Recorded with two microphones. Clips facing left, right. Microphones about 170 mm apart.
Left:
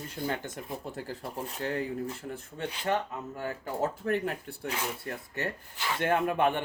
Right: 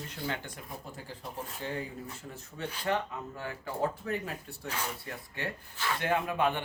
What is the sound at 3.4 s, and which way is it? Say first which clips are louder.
Speech: left 2 dB; 45° left (ahead or behind).